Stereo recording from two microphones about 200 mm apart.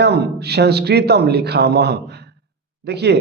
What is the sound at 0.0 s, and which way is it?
A man's voice, 55° right (ahead or behind).